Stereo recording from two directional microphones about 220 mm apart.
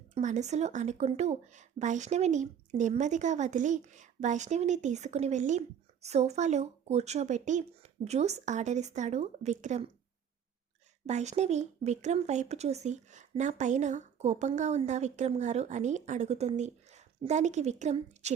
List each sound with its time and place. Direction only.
0.1 s speech: 35° right (ahead or behind)
11.0 s speech: 30° right (ahead or behind)